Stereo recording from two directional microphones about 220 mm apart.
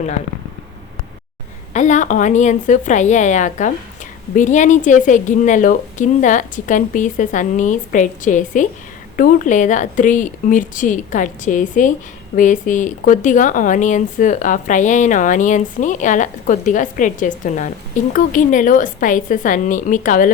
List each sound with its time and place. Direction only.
1.7 s speech: 35° left (ahead or behind)